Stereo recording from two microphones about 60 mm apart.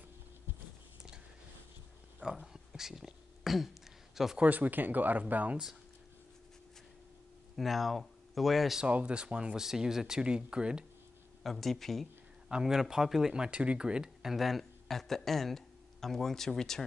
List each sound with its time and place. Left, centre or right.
2.1 s a sound: centre
4.4 s speech: right
7.5 s speech: centre
8.8 s speech: centre
11.4 s speech: centre
12.4 s speech: centre
13.3 s speech: centre